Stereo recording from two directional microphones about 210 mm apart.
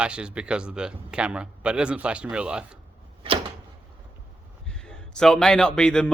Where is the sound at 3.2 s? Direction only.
25° right (ahead or behind).